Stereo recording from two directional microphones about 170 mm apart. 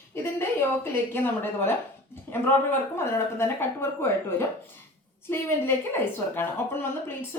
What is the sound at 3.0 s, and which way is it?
A woman's voice, 15° left (ahead or behind).